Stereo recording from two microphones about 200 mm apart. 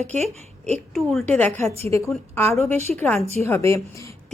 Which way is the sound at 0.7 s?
Centre (ahead or behind).